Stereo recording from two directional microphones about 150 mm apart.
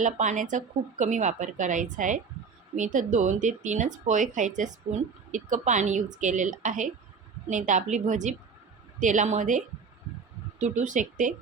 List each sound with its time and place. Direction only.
0.0 s a woman's voice: 55° right (ahead or behind)